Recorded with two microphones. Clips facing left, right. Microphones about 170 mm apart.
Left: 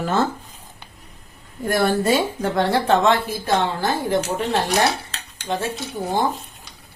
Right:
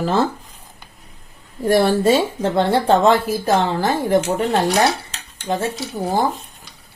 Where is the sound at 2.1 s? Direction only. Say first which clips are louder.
Right 3 dB; 25° right (ahead or behind).